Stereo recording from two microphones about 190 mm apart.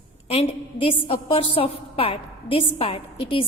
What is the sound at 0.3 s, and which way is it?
A woman's voice, 30° left (ahead or behind).